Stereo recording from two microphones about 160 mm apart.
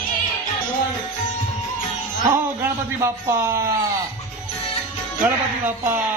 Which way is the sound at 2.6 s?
15° right (ahead or behind).